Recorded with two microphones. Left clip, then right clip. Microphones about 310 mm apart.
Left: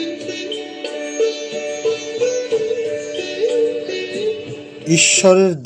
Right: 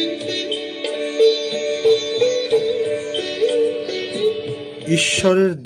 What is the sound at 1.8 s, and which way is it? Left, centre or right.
Music, right.